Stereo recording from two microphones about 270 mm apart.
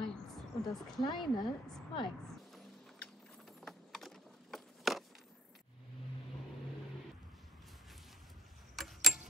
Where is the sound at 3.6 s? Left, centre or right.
Centre.